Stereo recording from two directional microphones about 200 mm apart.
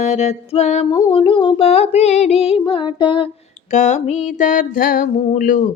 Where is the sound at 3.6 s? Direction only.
35° left (ahead or behind).